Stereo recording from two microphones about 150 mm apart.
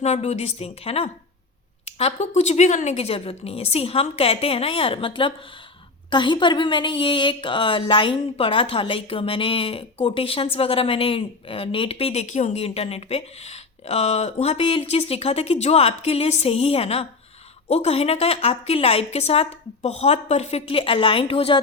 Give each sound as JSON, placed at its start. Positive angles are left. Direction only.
{"t": 0.0, "sound": "a woman's voice", "side_deg": 45}
{"t": 12.2, "sound": "a woman's voice", "side_deg": 50}